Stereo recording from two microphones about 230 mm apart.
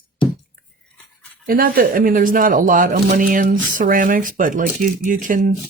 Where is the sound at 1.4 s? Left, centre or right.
Right.